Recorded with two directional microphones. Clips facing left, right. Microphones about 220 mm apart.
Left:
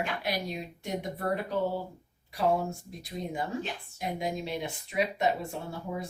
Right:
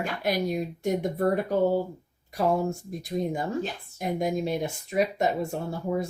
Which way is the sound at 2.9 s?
45° right (ahead or behind).